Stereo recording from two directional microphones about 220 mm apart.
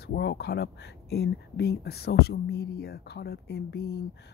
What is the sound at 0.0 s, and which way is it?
Speech, 45° left (ahead or behind).